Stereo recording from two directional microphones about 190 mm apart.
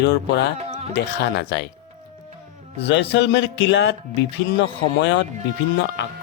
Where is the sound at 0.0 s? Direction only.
65° left (ahead or behind).